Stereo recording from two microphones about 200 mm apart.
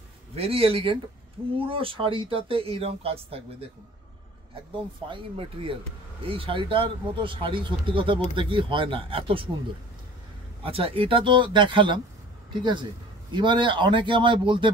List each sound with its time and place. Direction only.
0.3 s speech: 30° right (ahead or behind)
5.0 s speech: 25° right (ahead or behind)
10.6 s speech: 30° right (ahead or behind)
13.3 s speech: 25° right (ahead or behind)